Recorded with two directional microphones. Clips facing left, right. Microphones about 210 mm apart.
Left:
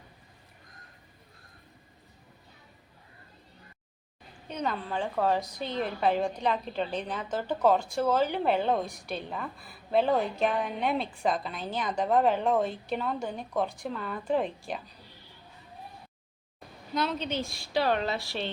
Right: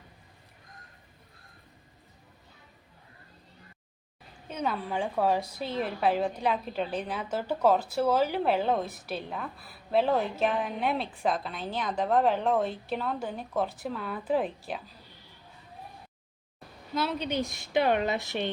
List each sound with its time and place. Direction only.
4.4 s a woman's voice: 5° right (ahead or behind)
16.9 s a woman's voice: 5° right (ahead or behind)